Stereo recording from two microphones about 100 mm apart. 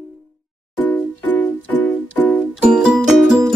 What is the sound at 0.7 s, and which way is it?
Music, 15° left (ahead or behind).